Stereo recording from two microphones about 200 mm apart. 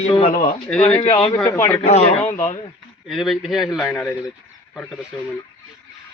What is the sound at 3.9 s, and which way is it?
Speech, 15° left (ahead or behind).